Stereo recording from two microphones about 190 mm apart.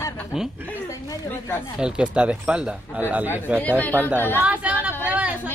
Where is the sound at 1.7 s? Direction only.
5° right (ahead or behind).